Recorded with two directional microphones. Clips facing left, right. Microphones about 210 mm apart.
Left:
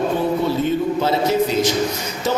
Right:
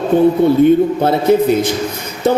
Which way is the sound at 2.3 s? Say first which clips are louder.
Right 8 dB; 55° right (ahead or behind).